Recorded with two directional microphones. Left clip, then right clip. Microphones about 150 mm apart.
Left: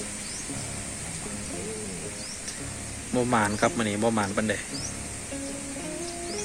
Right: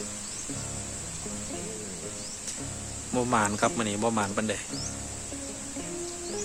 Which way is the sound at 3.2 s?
30° right (ahead or behind).